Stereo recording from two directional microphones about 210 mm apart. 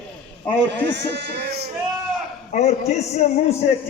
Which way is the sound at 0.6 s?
55° right (ahead or behind).